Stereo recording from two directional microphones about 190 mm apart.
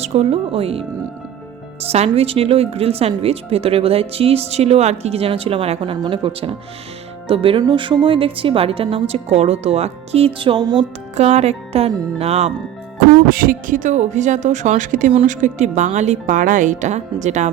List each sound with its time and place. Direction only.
0.0 s a woman's voice: 35° right (ahead or behind)
11.2 s a woman's voice: 35° right (ahead or behind)
13.2 s a woman's voice: 50° right (ahead or behind)